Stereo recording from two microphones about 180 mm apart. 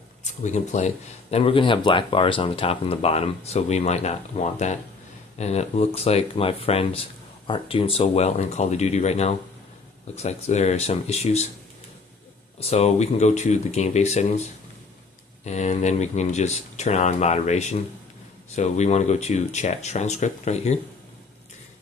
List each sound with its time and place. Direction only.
0.4 s speech: 40° left (ahead or behind)
12.5 s speech: 35° left (ahead or behind)
15.4 s speech: 40° left (ahead or behind)